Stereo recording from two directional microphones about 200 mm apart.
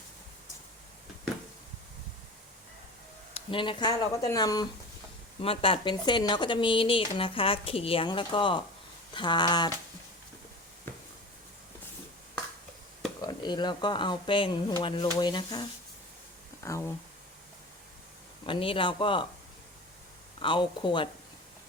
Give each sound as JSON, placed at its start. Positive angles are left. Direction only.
{"t": 3.3, "sound": "speech", "side_deg": 25}
{"t": 13.2, "sound": "speech", "side_deg": 20}
{"t": 16.6, "sound": "speech", "side_deg": 15}
{"t": 18.4, "sound": "speech", "side_deg": 25}
{"t": 20.4, "sound": "speech", "side_deg": 25}